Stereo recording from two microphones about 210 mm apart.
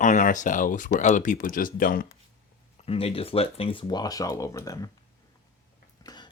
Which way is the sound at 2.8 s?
30° left (ahead or behind).